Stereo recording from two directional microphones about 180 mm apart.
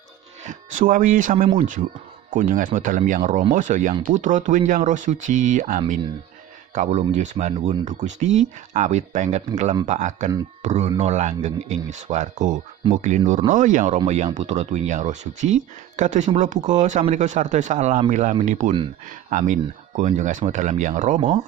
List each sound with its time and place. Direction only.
0.4 s speech: 45° right (ahead or behind)
2.3 s speech: 50° right (ahead or behind)